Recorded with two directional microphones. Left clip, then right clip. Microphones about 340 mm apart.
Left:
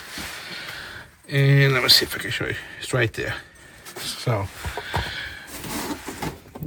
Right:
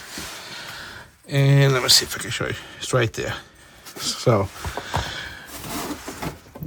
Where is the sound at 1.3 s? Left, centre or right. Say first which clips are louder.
Even; centre.